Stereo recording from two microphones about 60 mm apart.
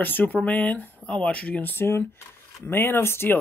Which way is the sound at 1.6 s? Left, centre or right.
Left.